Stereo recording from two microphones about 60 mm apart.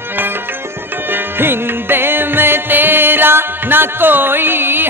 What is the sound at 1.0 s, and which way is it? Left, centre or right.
Music, right.